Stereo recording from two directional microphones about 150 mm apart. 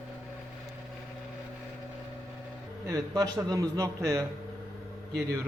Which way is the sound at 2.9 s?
20° right (ahead or behind).